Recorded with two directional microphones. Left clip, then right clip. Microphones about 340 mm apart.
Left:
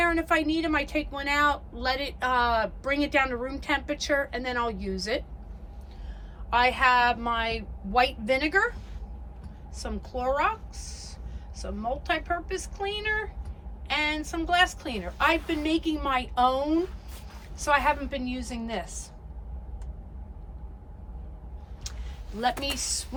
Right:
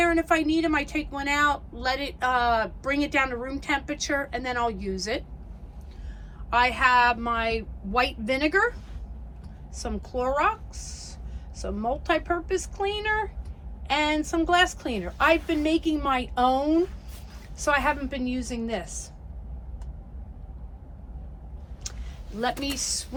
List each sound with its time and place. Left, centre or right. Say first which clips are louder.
0.0 s a woman's voice: right 2 dB; centre
6.5 s a woman's voice: right 1 dB; centre
21.8 s a sound: right 2 dB; centre
22.4 s a woman's voice: even; centre